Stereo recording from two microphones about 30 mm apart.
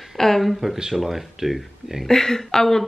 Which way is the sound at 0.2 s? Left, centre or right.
Centre.